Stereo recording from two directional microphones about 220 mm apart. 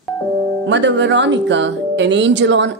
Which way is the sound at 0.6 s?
55° right (ahead or behind).